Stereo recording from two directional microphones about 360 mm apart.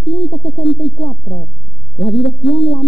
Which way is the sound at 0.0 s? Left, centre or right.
Left.